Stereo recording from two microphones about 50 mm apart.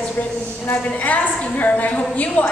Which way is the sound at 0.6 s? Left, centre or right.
Left.